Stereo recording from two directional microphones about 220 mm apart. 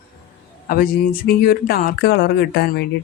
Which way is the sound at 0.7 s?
40° left (ahead or behind).